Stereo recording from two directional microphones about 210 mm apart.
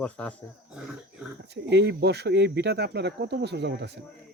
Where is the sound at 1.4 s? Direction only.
55° right (ahead or behind).